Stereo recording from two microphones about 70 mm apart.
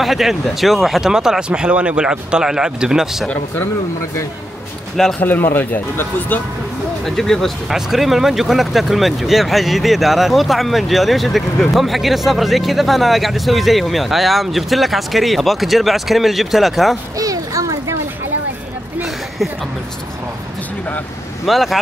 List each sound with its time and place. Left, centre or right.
0.0 s speech: centre
5.2 s speech: left
7.1 s speech: centre
17.2 s children playing: right
19.0 s a sound: centre
21.5 s speech: centre